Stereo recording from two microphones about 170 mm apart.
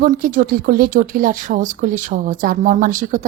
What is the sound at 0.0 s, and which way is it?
Speech, 55° right (ahead or behind).